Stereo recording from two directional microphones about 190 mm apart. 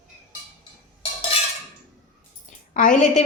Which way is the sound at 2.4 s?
45° left (ahead or behind).